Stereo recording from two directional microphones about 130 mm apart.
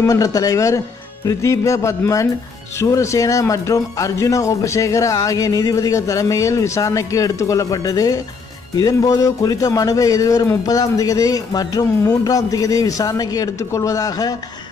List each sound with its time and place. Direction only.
0.0 s speech: 25° left (ahead or behind)